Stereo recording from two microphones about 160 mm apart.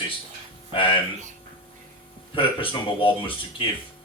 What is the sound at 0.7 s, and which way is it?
Speech, 35° left (ahead or behind).